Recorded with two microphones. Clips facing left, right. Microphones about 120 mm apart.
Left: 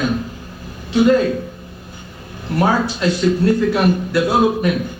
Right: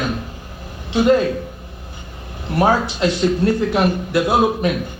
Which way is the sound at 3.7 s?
20° right (ahead or behind).